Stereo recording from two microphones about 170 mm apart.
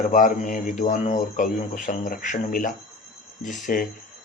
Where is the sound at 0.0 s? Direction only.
50° left (ahead or behind).